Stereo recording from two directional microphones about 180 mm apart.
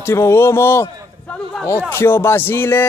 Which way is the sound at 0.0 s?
15° left (ahead or behind).